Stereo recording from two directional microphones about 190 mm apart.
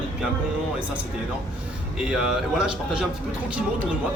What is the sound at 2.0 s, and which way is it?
Speech, 5° right (ahead or behind).